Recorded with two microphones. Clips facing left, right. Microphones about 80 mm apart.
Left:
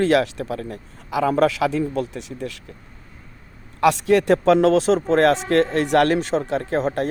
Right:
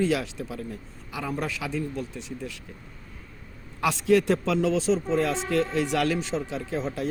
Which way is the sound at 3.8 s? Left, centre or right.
Left.